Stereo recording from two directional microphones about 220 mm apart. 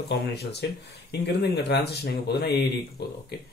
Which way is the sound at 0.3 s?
50° left (ahead or behind).